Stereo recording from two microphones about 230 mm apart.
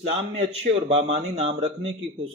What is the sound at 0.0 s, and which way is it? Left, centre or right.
A man's voice, right.